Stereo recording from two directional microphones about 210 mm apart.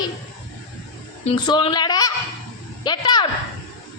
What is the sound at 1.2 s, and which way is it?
Speech, 25° left (ahead or behind).